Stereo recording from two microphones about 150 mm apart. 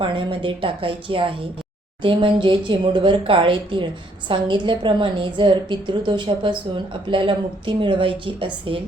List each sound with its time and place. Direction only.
0.0 s a woman's voice: 35° right (ahead or behind)